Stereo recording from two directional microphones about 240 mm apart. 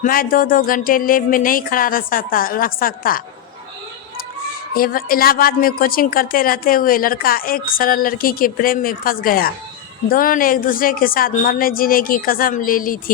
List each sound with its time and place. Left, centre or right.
0.0 s a woman's voice: left
4.7 s a woman's voice: left